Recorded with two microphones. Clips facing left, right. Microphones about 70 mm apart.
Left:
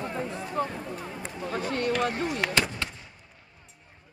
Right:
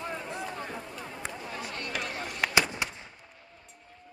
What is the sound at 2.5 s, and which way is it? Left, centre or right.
Artillery fire, centre.